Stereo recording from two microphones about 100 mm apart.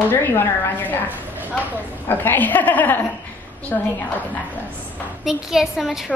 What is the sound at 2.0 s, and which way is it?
A woman's voice, 20° left (ahead or behind).